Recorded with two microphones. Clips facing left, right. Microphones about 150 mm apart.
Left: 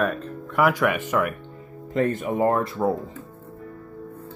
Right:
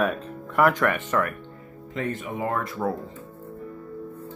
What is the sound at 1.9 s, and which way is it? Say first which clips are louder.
Speech: left 7 dB; 40° left (ahead or behind).